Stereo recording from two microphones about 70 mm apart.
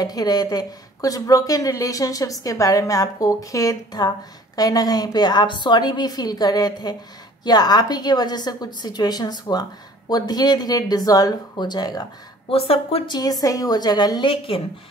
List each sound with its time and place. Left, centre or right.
0.0 s a woman's voice: left
13.1 s a woman's voice: left